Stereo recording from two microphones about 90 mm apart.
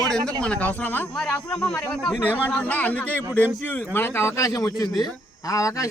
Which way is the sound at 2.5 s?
15° left (ahead or behind).